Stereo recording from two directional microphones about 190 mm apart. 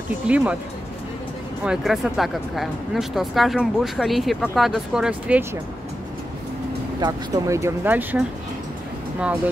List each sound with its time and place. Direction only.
0.3 s speech: 5° right (ahead or behind)
1.6 s speech: 5° right (ahead or behind)
7.0 s speech: 15° right (ahead or behind)